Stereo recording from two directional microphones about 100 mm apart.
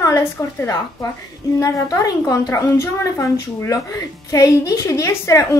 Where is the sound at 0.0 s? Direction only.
30° left (ahead or behind).